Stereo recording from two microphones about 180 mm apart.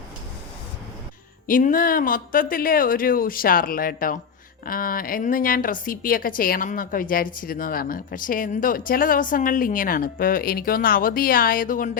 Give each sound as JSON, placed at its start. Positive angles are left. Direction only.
{"t": 1.5, "sound": "speech", "side_deg": 50}